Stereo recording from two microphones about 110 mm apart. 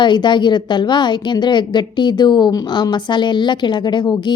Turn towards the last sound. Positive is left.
turn(degrees=40)  # may be behind; listen again after turning